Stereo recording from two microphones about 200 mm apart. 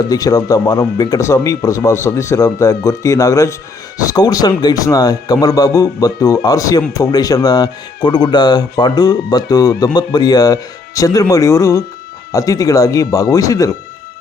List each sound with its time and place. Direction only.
0.1 s speech: 20° left (ahead or behind)